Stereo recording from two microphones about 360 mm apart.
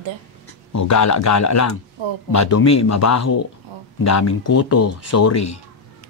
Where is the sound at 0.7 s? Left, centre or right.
Left.